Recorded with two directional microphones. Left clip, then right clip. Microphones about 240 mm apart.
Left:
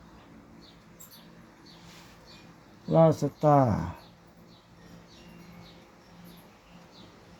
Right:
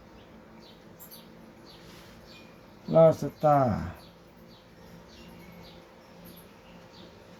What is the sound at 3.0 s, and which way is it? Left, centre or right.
Speech, left.